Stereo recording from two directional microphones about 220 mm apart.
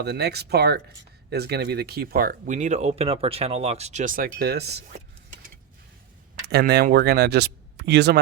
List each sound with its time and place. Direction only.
0.0 s speech: 45° right (ahead or behind)
6.4 s speech: 50° right (ahead or behind)